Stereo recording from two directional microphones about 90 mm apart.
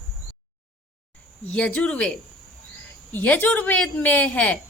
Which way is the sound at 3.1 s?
20° left (ahead or behind).